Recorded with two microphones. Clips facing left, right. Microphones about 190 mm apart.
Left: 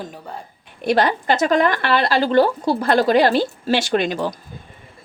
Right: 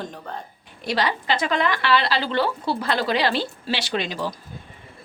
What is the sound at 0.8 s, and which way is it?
Speech, 50° left (ahead or behind).